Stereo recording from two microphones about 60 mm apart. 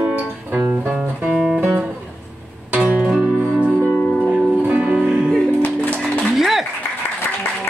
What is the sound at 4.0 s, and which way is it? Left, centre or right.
Music, centre.